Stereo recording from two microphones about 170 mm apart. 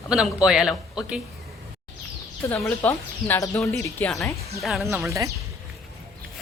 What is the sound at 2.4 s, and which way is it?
Speech, 15° left (ahead or behind).